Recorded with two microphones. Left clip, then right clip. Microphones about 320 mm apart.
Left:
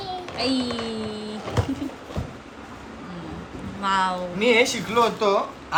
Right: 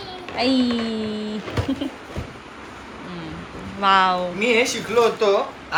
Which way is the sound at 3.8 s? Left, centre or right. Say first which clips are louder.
Right 6 dB; centre.